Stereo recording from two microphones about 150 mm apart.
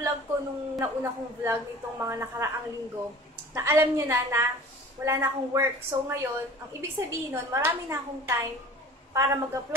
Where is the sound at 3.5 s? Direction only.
15° right (ahead or behind).